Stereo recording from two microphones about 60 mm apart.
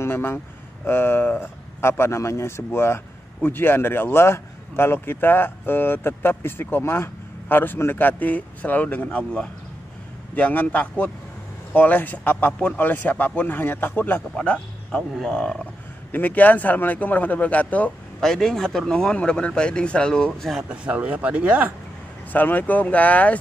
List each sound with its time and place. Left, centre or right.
0.0 s speech: left
1.8 s speech: left
14.3 s speech: centre
16.1 s speech: left
18.2 s speech: centre
20.6 s speech: centre
22.3 s speech: left